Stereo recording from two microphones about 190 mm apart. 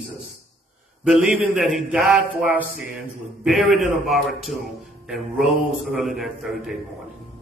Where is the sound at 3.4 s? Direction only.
Centre (ahead or behind).